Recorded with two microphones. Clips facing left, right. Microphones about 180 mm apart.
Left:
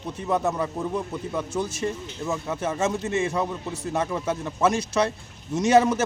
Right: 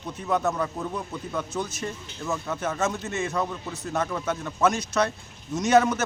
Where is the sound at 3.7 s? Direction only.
30° left (ahead or behind).